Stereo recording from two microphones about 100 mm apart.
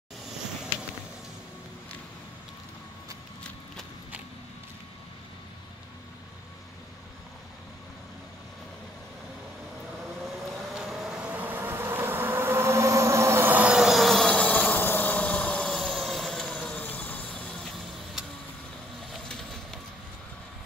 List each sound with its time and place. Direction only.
10.7 s vehicle: 5° right (ahead or behind)
13.7 s vehicle: centre (ahead or behind)